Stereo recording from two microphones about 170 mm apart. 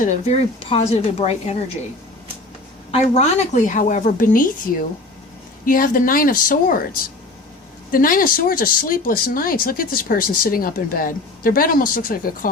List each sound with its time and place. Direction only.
0.0 s speech: 40° left (ahead or behind)
2.9 s a woman's voice: 45° left (ahead or behind)
7.9 s speech: 55° left (ahead or behind)